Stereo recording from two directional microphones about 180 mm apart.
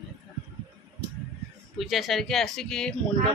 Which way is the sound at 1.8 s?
Centre (ahead or behind).